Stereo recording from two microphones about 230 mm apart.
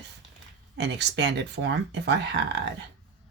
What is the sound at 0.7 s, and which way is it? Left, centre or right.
Speech, right.